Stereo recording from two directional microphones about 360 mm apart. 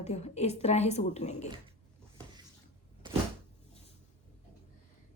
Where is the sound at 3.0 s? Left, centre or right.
Centre.